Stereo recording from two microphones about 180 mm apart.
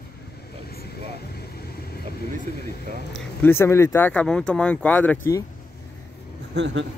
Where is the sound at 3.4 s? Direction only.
10° left (ahead or behind).